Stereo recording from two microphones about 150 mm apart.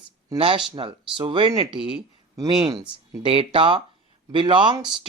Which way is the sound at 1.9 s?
25° right (ahead or behind).